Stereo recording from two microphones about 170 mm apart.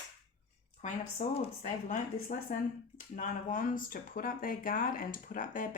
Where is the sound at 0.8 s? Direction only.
40° left (ahead or behind).